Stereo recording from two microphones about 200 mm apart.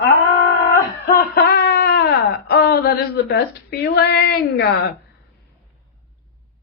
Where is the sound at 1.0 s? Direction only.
50° left (ahead or behind).